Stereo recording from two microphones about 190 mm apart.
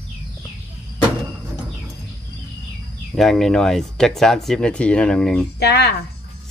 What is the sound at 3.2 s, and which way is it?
Speech, centre (ahead or behind).